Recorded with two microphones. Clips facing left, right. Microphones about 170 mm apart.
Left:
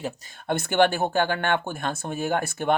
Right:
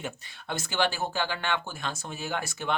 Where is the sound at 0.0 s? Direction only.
40° left (ahead or behind).